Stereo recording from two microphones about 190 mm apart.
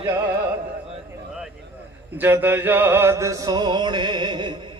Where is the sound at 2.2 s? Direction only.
10° right (ahead or behind).